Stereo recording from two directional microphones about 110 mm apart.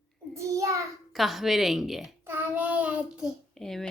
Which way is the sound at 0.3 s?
30° right (ahead or behind).